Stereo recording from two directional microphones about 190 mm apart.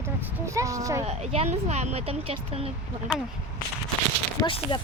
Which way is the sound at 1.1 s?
35° right (ahead or behind).